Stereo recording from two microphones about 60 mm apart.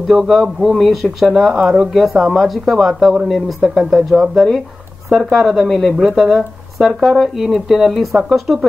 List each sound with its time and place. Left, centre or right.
0.1 s speech: centre